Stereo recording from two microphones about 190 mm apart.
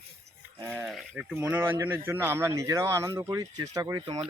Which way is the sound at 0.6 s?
10° right (ahead or behind).